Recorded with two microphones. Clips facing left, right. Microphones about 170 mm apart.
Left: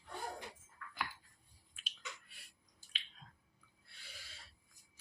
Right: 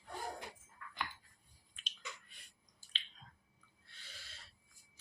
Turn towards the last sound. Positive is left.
turn(degrees=10)  # may be behind; listen again after turning